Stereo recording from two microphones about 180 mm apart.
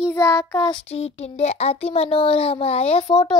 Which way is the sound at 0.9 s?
35° left (ahead or behind).